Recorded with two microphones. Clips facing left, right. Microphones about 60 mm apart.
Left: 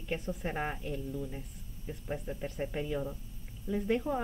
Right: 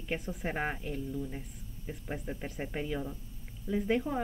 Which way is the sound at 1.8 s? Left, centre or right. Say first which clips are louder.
Left 1 dB; centre.